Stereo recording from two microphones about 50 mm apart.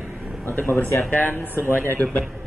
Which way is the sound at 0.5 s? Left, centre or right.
Left.